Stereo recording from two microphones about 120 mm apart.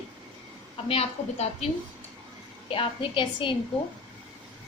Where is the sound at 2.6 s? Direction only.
50° left (ahead or behind).